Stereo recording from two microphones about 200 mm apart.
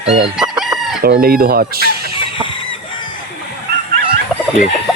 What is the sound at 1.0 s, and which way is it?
Speech, 50° right (ahead or behind).